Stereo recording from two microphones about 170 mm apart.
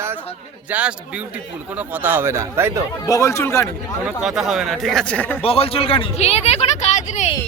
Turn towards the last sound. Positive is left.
turn(degrees=40)  # may be behind; listen again after turning